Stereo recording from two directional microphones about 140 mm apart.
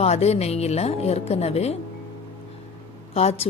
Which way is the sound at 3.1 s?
45° left (ahead or behind).